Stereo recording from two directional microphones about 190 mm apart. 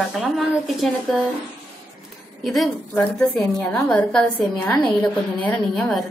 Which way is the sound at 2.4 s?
Centre (ahead or behind).